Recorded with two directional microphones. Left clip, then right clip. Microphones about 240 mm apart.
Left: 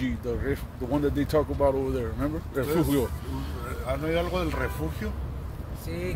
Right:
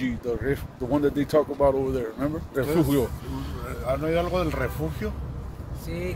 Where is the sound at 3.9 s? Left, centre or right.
Right.